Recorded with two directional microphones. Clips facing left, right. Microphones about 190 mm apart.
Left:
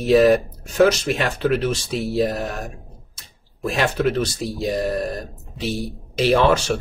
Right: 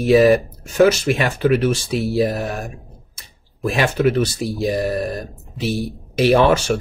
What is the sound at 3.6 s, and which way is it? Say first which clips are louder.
Speech: right 3 dB; 5° right (ahead or behind).